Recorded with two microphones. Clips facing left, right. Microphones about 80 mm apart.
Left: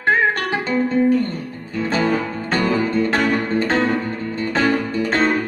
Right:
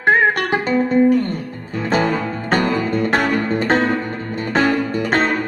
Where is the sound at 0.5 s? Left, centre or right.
Right.